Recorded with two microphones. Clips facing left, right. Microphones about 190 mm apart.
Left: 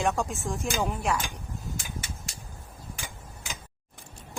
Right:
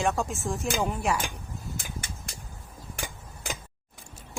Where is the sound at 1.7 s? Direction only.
55° right (ahead or behind).